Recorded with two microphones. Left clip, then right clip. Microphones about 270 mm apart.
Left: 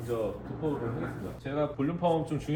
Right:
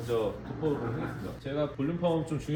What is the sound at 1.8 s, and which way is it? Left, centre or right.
Speech, centre.